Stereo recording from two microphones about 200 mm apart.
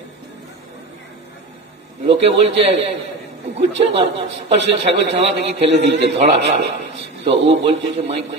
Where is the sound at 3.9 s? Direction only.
30° right (ahead or behind).